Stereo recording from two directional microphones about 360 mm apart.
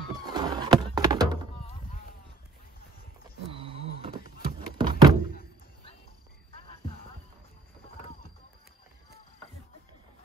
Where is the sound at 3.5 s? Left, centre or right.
Centre.